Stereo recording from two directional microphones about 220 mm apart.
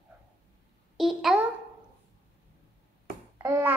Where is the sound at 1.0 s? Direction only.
Centre (ahead or behind).